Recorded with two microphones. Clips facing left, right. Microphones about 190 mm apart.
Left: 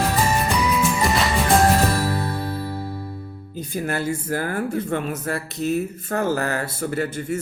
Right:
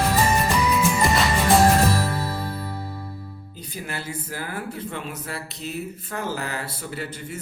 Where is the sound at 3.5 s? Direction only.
45° left (ahead or behind).